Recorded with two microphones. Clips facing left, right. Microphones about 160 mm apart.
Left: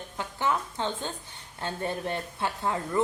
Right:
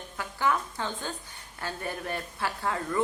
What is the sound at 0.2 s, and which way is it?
A woman's voice, 20° left (ahead or behind).